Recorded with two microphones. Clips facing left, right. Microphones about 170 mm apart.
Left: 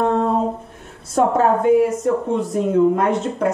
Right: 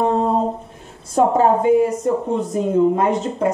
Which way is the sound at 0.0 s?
5° right (ahead or behind).